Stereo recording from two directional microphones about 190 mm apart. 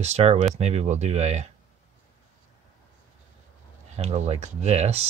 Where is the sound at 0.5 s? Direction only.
35° right (ahead or behind).